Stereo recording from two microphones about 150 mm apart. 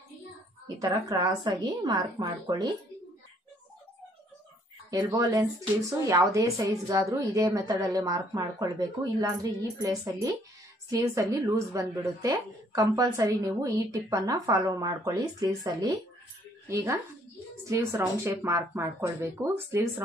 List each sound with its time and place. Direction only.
0.7 s a woman's voice: 25° right (ahead or behind)
4.9 s a woman's voice: 25° right (ahead or behind)